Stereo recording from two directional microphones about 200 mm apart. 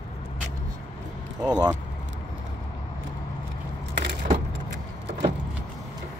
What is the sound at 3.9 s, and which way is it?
Keys jangling, 60° right (ahead or behind).